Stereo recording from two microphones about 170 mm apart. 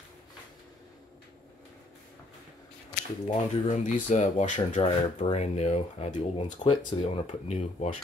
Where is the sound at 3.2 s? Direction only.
40° left (ahead or behind).